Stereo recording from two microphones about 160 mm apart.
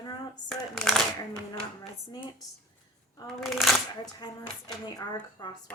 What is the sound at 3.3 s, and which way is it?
Speech, centre (ahead or behind).